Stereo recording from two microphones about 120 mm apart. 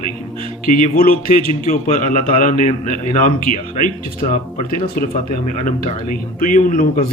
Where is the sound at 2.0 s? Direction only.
90° left.